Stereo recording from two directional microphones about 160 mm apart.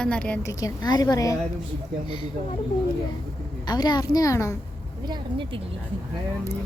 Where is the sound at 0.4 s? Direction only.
25° left (ahead or behind).